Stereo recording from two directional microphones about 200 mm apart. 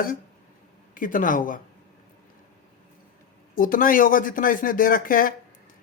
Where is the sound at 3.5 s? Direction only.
45° left (ahead or behind).